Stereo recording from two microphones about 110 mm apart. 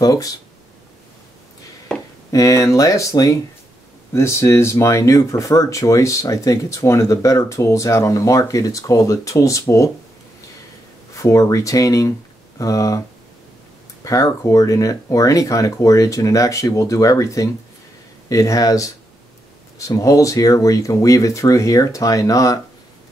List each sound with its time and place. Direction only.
0.0 s speech: 35° left (ahead or behind)
2.3 s speech: 30° left (ahead or behind)
11.1 s speech: 30° left (ahead or behind)
14.0 s speech: 30° left (ahead or behind)
20.0 s speech: 30° left (ahead or behind)